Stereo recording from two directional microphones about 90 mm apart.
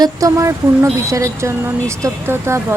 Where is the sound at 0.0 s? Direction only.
40° right (ahead or behind).